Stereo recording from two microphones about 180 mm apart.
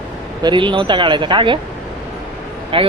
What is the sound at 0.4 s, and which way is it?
Speech, 25° right (ahead or behind).